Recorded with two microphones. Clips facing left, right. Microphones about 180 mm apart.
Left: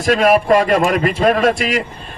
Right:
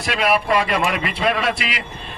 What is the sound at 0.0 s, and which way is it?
A man's voice, 45° left (ahead or behind).